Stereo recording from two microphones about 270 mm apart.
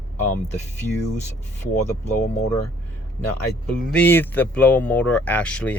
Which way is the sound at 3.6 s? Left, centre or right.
Centre.